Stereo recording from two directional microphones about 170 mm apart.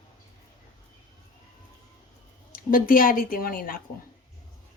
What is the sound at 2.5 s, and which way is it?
A woman's voice, 55° left (ahead or behind).